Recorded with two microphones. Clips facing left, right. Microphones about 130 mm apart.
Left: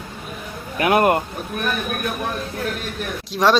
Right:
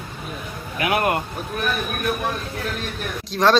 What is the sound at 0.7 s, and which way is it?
Speech, 45° left (ahead or behind).